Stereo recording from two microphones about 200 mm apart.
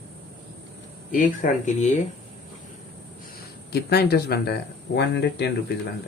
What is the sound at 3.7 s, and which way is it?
Speech, 50° left (ahead or behind).